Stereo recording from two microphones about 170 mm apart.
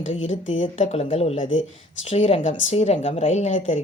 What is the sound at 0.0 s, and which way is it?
Speech, 40° left (ahead or behind).